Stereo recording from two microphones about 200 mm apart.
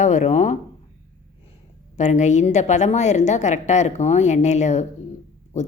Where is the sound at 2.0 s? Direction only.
35° left (ahead or behind).